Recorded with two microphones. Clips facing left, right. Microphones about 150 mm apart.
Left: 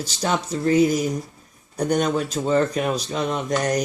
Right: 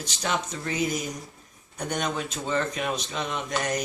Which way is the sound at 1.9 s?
35° left (ahead or behind).